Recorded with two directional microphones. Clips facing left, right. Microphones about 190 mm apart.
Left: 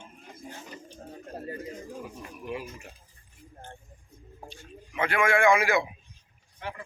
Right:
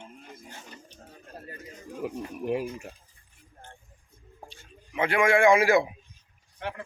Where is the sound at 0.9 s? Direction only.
30° left (ahead or behind).